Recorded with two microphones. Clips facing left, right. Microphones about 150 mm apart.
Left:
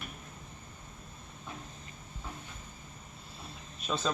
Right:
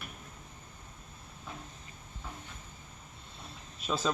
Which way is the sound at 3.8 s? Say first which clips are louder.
Right 1 dB; 5° right (ahead or behind).